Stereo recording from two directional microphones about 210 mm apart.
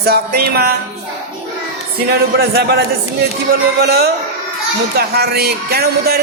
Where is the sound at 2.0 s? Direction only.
50° right (ahead or behind).